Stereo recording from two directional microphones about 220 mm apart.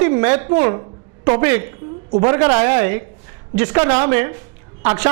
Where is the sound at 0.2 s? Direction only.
15° right (ahead or behind).